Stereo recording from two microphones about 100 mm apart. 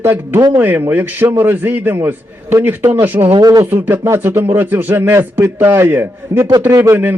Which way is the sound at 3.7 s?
20° right (ahead or behind).